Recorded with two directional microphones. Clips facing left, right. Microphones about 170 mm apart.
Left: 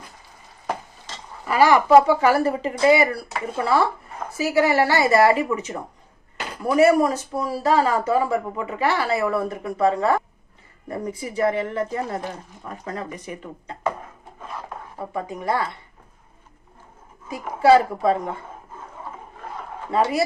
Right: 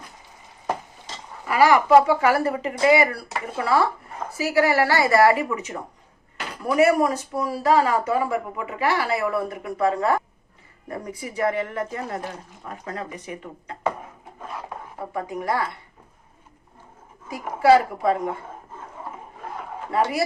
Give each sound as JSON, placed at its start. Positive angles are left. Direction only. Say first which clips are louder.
{"t": 1.5, "sound": "speech", "louder": "left 1 dB", "side_deg": 30}
{"t": 15.1, "sound": "speech", "louder": "left 1 dB", "side_deg": 25}
{"t": 17.2, "sound": "speech", "louder": "left 1 dB", "side_deg": 25}
{"t": 19.9, "sound": "speech", "louder": "left 2 dB", "side_deg": 25}